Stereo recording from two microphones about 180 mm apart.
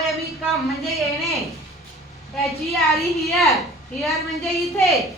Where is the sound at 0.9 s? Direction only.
Centre (ahead or behind).